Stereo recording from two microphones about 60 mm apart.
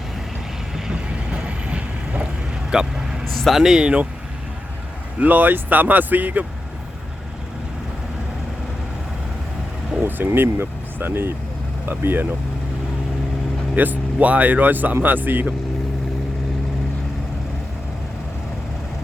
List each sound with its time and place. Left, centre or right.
0.9 s vehicle: centre
3.2 s a sound: centre
3.6 s speech: centre
5.2 s speech: right
10.0 s speech: right
13.8 s speech: right